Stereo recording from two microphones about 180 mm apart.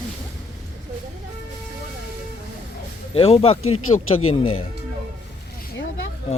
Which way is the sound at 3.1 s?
30° left (ahead or behind).